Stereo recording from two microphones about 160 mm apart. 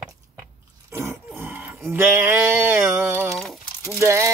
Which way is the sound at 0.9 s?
15° right (ahead or behind).